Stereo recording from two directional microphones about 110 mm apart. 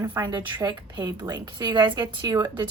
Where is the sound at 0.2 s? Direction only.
40° right (ahead or behind).